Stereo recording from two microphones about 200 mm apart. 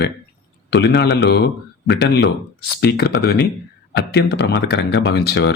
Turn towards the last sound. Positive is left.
turn(degrees=55)  # may be behind; listen again after turning